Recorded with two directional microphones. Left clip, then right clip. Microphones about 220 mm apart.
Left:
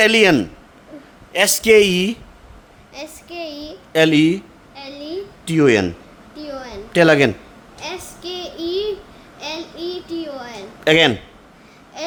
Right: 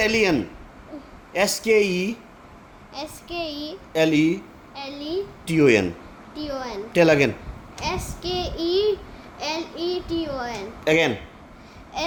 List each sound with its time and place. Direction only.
0.0 s speech: 35° left (ahead or behind)
2.9 s child singing: 10° left (ahead or behind)
3.9 s speech: 35° left (ahead or behind)
4.7 s a sound: 10° left (ahead or behind)
5.5 s speech: 25° left (ahead or behind)
6.3 s a woman's voice: 10° left (ahead or behind)
6.9 s speech: 30° left (ahead or behind)
7.8 s child singing: 10° left (ahead or behind)
10.8 s speech: 35° left (ahead or behind)